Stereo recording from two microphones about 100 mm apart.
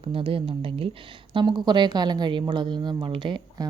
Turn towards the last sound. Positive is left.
turn(degrees=-50)  # may be behind; listen again after turning